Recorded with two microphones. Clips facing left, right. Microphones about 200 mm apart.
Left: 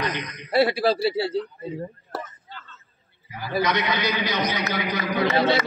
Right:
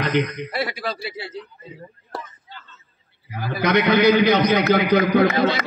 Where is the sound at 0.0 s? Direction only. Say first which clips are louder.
Right 8 dB; 55° right (ahead or behind).